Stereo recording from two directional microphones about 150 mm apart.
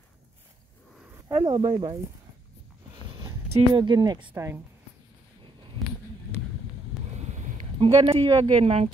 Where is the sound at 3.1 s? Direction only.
35° right (ahead or behind).